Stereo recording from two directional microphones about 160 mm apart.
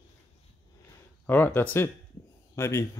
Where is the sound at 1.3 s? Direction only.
10° left (ahead or behind).